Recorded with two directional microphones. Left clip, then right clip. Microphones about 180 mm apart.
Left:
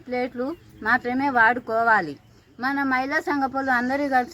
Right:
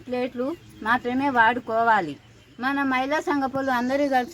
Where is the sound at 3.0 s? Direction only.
20° left (ahead or behind).